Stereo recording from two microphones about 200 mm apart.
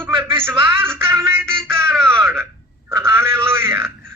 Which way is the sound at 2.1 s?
10° right (ahead or behind).